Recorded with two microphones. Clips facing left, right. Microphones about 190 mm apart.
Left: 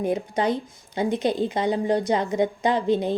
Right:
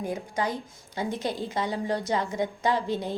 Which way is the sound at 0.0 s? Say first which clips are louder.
Left 6 dB; 20° left (ahead or behind).